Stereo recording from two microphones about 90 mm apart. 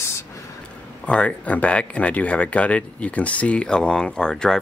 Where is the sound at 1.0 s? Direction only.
15° left (ahead or behind).